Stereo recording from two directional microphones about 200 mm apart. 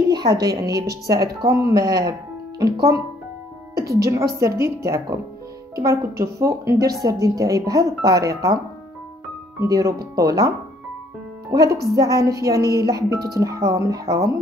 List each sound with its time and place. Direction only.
0.3 s a woman's voice: 20° right (ahead or behind)
3.7 s a woman's voice: 50° right (ahead or behind)
4.0 s a woman's voice: 15° right (ahead or behind)
9.6 s a woman's voice: 15° right (ahead or behind)
11.5 s a woman's voice: 15° right (ahead or behind)